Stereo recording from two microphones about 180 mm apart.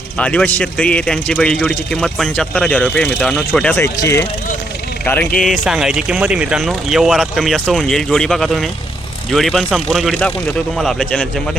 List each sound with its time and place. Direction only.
0.2 s speech: 5° left (ahead or behind)
5.4 s speech: centre (ahead or behind)